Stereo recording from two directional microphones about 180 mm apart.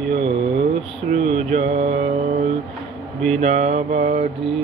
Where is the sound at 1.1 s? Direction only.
40° right (ahead or behind).